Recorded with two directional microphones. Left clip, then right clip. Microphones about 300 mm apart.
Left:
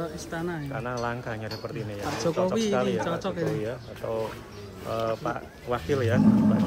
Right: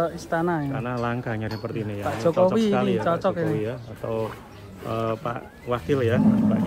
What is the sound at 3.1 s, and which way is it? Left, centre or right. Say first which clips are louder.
Speech: right 6 dB; centre.